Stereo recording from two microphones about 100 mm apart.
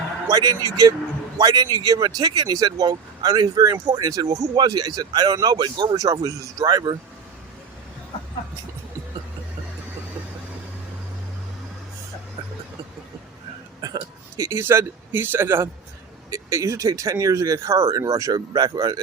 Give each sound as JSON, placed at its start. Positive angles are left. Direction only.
{"t": 0.3, "sound": "speech", "side_deg": -40}
{"t": 13.8, "sound": "speech", "side_deg": -35}